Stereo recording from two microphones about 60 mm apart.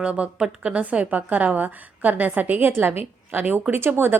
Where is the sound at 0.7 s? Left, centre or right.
Right.